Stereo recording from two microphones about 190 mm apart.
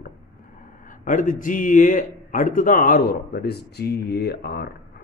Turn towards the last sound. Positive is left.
turn(degrees=55)  # may be behind; listen again after turning